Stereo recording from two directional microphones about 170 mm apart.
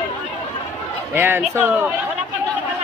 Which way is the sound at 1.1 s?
15° right (ahead or behind).